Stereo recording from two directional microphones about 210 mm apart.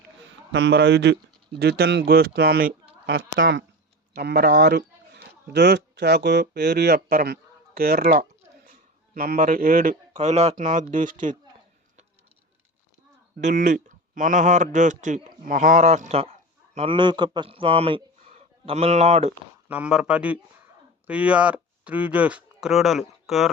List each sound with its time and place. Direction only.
0.5 s speech: 55° right (ahead or behind)
3.2 s speech: 60° right (ahead or behind)
4.1 s speech: 50° right (ahead or behind)
10.2 s a man's voice: 30° right (ahead or behind)
13.4 s a man's voice: 35° right (ahead or behind)
19.6 s speech: 5° right (ahead or behind)